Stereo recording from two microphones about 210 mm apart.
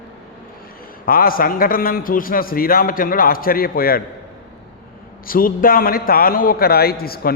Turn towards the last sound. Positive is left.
turn(degrees=45)  # may be behind; listen again after turning